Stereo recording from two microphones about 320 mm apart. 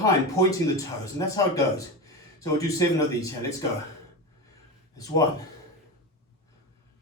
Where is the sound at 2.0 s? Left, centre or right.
Centre.